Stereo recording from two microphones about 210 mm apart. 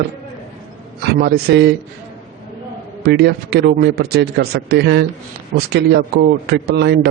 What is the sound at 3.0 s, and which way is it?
A man's voice, 50° right (ahead or behind).